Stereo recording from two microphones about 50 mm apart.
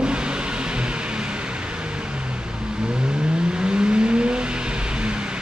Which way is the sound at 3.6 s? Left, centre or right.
Centre.